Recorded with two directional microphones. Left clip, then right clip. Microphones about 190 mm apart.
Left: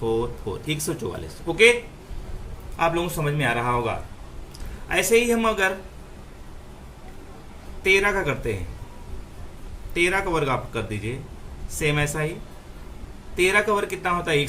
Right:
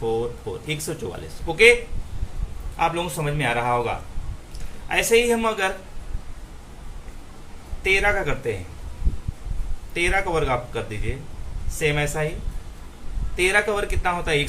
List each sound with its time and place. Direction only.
0.7 s speech: 25° left (ahead or behind)
2.7 s speech: 15° left (ahead or behind)
7.9 s speech: 20° left (ahead or behind)
9.9 s speech: 20° left (ahead or behind)
13.3 s speech: 20° left (ahead or behind)